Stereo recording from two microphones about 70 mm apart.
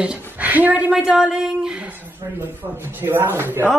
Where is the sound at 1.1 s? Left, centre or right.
Centre.